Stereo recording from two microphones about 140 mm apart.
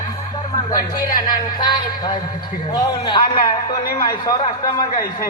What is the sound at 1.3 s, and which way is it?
Music, 30° left (ahead or behind).